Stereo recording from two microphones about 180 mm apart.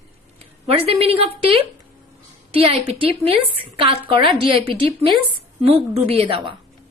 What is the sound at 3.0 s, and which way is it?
A woman's voice, 30° right (ahead or behind).